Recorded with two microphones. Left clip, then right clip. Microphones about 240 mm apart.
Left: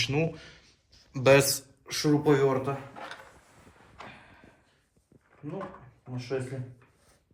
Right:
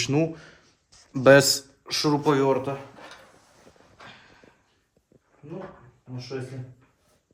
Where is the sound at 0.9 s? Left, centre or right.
Right.